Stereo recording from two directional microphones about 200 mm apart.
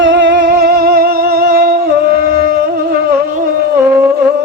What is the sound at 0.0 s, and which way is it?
Music, 65° right (ahead or behind).